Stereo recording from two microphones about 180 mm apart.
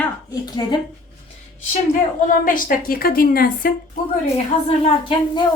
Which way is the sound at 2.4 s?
50° left (ahead or behind).